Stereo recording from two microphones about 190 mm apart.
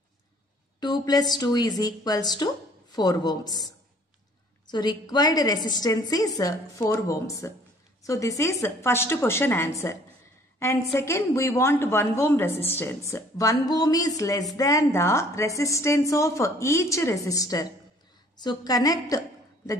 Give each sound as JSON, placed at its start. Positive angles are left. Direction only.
{"t": 0.7, "sound": "a woman's voice", "side_deg": 20}
{"t": 4.6, "sound": "a woman's voice", "side_deg": 20}